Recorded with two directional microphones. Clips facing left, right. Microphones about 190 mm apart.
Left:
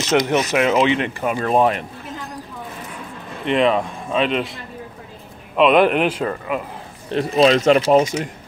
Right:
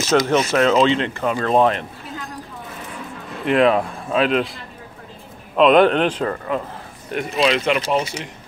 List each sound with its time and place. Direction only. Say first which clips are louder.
0.1 s speech: right 1 dB; 15° left (ahead or behind)
3.4 s speech: right 1 dB; centre (ahead or behind)
5.6 s speech: right 1 dB; 5° left (ahead or behind)
7.1 s speech: left 5 dB; 35° left (ahead or behind)